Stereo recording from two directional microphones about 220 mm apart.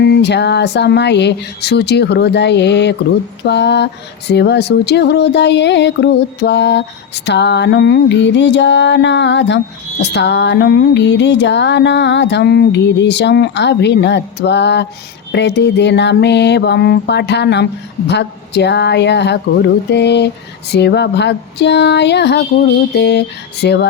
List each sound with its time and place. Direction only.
0.0 s music: 50° left (ahead or behind)